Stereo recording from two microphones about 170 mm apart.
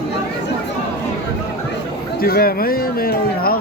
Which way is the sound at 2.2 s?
65° left (ahead or behind).